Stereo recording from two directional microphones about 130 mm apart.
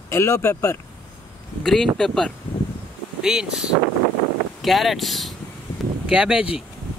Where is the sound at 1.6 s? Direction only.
5° left (ahead or behind).